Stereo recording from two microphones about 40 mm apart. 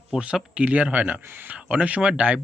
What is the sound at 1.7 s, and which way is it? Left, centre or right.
Speech, right.